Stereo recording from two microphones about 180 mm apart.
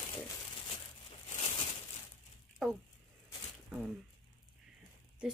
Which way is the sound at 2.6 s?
Centre (ahead or behind).